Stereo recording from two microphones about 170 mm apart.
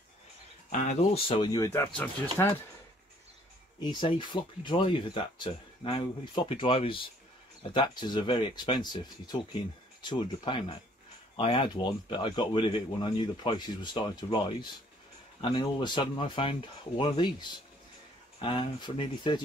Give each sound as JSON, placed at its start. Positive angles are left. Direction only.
{"t": 0.7, "sound": "speech", "side_deg": 40}
{"t": 3.8, "sound": "speech", "side_deg": 25}